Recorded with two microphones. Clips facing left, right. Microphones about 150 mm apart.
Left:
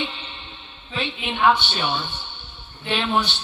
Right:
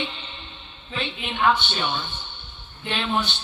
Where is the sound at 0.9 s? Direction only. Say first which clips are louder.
Left 2 dB; 15° left (ahead or behind).